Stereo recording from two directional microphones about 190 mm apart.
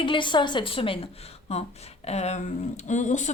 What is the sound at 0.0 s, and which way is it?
A woman's voice, 25° left (ahead or behind).